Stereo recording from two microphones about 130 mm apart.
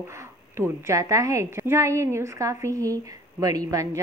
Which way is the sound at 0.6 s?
25° right (ahead or behind).